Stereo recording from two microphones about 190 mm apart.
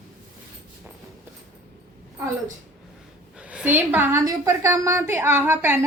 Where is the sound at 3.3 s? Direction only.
5° right (ahead or behind).